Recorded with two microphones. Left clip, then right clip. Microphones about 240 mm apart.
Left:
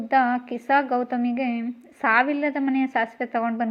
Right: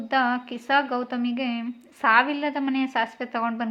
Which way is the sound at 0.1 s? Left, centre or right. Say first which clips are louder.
Left 3 dB; centre.